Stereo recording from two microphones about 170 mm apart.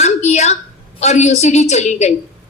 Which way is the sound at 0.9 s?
40° left (ahead or behind).